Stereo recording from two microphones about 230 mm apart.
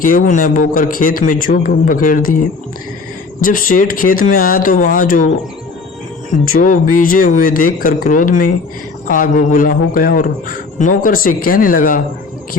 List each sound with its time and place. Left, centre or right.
0.0 s a man's voice: left
3.4 s a man's voice: left
6.6 s a man's voice: left